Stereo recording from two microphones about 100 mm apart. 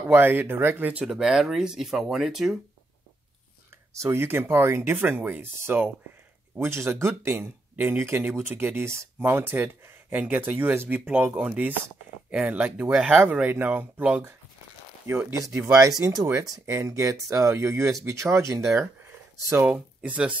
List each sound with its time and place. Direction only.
0.1 s speech: 20° right (ahead or behind)
1.0 s speech: 5° right (ahead or behind)
3.9 s speech: 25° right (ahead or behind)
19.5 s speech: 15° right (ahead or behind)